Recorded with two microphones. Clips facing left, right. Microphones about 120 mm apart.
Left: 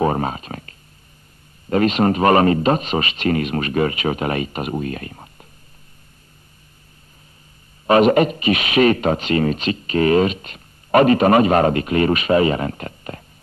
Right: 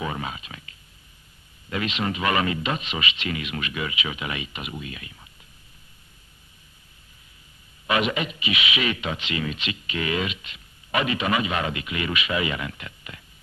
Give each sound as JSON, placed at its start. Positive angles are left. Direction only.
{"t": 0.0, "sound": "a sound", "side_deg": 45}
{"t": 1.7, "sound": "speech", "side_deg": 45}
{"t": 7.8, "sound": "speech", "side_deg": 45}